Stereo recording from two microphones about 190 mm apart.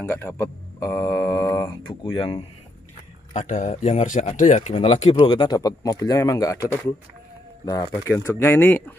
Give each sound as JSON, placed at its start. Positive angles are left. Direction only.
{"t": 0.0, "sound": "speech", "side_deg": 15}
{"t": 3.3, "sound": "speech", "side_deg": 40}